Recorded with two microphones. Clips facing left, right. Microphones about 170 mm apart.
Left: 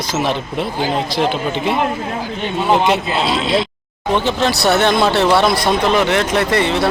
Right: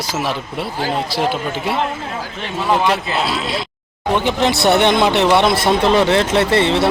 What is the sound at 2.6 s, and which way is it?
Speech, 25° left (ahead or behind).